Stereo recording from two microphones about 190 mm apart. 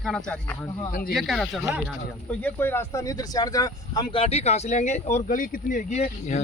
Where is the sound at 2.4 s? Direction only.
10° left (ahead or behind); by 6.4 s 35° left (ahead or behind).